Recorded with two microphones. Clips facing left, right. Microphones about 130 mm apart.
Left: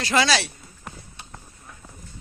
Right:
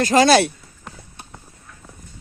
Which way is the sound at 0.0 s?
45° right (ahead or behind).